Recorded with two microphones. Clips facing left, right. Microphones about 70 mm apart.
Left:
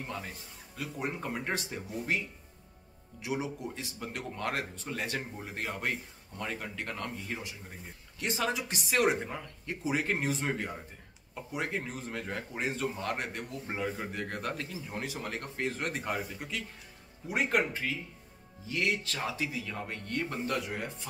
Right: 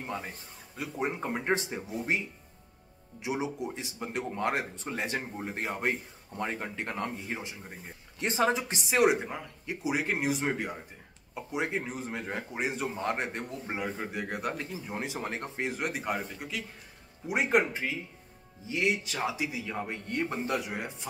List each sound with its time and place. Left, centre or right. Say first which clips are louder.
0.0 s speech: right 3 dB; right
8.9 s speech: right 3 dB; centre
13.7 s speech: even; centre
17.3 s speech: right 3 dB; centre